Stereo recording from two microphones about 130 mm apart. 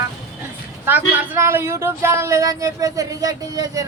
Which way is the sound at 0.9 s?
15° right (ahead or behind).